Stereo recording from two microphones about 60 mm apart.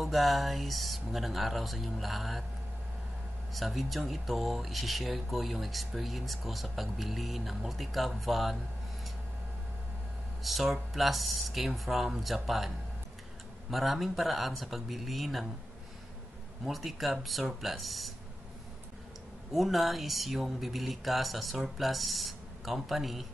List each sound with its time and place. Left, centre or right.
0.0 s speech: centre
3.5 s speech: centre
10.4 s speech: centre
16.6 s speech: centre
19.5 s speech: centre